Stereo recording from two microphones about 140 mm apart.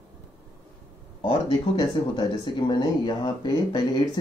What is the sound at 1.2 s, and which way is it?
Speech, 35° left (ahead or behind).